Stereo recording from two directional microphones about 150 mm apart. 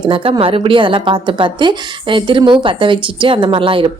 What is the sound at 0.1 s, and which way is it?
A woman's voice, 35° right (ahead or behind).